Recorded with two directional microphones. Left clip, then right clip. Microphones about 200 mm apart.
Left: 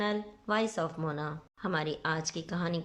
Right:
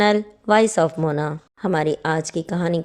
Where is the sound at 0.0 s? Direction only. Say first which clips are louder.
Right 15 dB; 45° right (ahead or behind).